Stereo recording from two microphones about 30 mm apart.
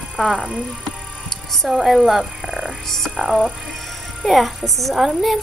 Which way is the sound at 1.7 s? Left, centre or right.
Centre.